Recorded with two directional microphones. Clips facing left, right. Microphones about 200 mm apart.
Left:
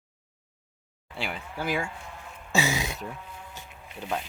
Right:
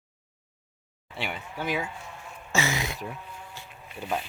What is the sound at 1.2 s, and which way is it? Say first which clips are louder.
Speech: even; centre (ahead or behind).